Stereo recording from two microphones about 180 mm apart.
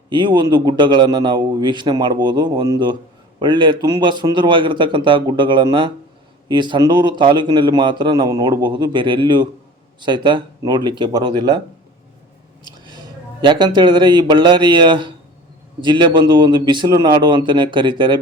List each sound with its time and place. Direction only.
0.1 s a man's voice: 25° right (ahead or behind)
13.4 s a man's voice: 25° right (ahead or behind)